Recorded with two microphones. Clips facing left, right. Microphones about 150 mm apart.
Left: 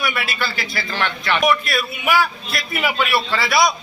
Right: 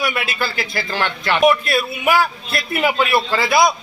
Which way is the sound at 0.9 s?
30° right (ahead or behind).